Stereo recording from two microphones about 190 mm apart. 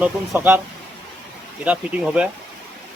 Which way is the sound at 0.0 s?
10° right (ahead or behind).